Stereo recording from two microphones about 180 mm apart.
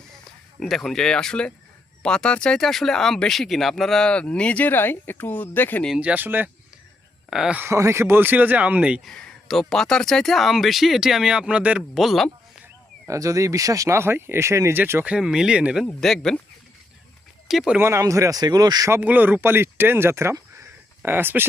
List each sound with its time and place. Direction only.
0.6 s speech: centre (ahead or behind)
5.9 s speech: 5° right (ahead or behind)
13.1 s speech: 20° right (ahead or behind); by 16.4 s 5° left (ahead or behind)
17.5 s speech: 5° right (ahead or behind); by 18.9 s 20° right (ahead or behind)
18.9 s speech: 10° right (ahead or behind)